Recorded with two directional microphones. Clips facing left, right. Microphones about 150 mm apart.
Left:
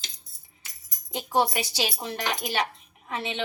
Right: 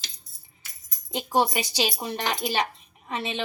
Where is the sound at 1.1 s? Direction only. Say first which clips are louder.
Right 1 dB; 15° right (ahead or behind).